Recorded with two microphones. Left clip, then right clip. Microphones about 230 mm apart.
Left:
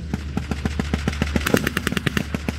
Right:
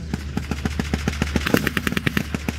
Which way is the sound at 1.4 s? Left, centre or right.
Left.